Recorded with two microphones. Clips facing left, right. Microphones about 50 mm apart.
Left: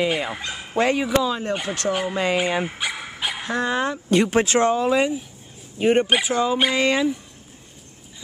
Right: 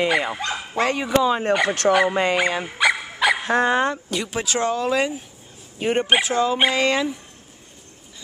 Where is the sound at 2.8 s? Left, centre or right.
Right.